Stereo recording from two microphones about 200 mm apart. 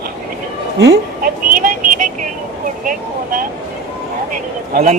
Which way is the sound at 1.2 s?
45° right (ahead or behind).